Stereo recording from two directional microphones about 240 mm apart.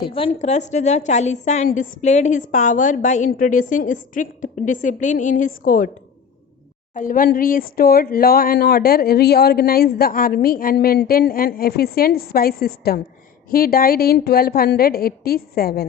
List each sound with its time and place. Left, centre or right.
0.3 s speech: left
6.9 s speech: left